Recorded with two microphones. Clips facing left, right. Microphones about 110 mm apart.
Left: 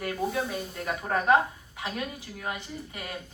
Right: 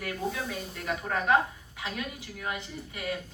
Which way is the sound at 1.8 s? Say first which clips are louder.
Left 2 dB; 30° left (ahead or behind).